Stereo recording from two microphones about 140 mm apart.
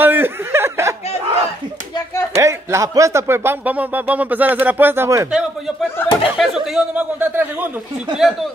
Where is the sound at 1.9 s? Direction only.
25° left (ahead or behind).